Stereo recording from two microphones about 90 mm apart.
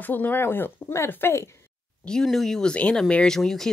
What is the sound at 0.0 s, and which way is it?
Speech, 20° left (ahead or behind).